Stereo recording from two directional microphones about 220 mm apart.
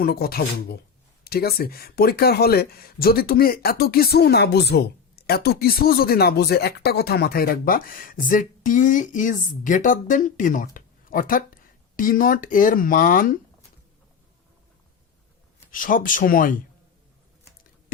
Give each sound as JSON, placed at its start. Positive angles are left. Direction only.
{"t": 0.0, "sound": "speech", "side_deg": 45}
{"t": 15.7, "sound": "speech", "side_deg": 40}